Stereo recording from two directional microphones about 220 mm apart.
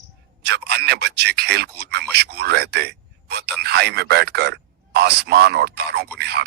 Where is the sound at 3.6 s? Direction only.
50° right (ahead or behind).